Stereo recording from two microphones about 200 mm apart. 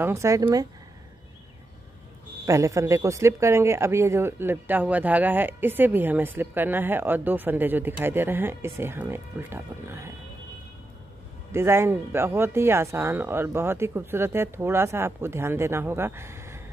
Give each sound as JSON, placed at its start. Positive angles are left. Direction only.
{"t": 0.0, "sound": "speech", "side_deg": -15}
{"t": 2.4, "sound": "speech", "side_deg": -15}
{"t": 11.5, "sound": "speech", "side_deg": -10}